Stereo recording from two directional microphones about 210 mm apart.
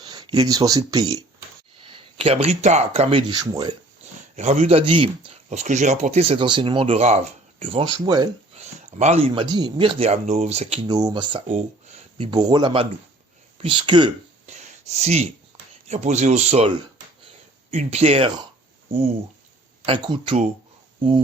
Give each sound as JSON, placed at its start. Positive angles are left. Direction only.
{"t": 0.0, "sound": "speech", "side_deg": -20}
{"t": 4.4, "sound": "speech", "side_deg": -30}
{"t": 8.5, "sound": "speech", "side_deg": -30}
{"t": 10.8, "sound": "speech", "side_deg": -20}
{"t": 19.8, "sound": "speech", "side_deg": -25}